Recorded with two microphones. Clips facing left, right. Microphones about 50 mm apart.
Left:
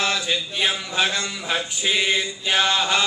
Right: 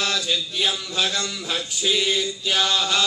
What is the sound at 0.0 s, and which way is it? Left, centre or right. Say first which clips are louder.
A man's voice: left 1 dB; left.